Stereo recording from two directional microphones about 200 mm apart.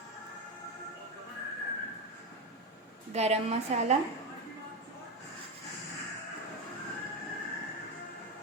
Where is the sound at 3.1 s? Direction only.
35° right (ahead or behind).